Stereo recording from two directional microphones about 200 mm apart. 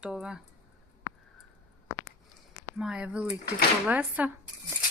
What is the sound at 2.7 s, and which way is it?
Speech, 5° right (ahead or behind).